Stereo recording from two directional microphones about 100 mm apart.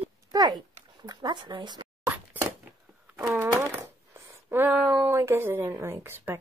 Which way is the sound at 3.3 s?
30° right (ahead or behind).